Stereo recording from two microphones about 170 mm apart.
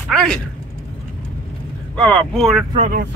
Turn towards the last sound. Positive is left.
turn(degrees=-50)  # may be behind; listen again after turning